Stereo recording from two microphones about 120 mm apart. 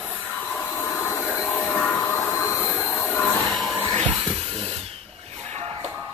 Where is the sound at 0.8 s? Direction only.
20° left (ahead or behind).